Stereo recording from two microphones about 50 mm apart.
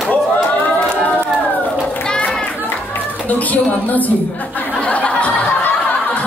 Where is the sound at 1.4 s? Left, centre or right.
Left.